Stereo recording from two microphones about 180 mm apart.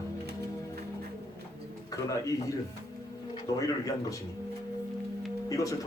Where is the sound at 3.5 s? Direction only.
20° left (ahead or behind).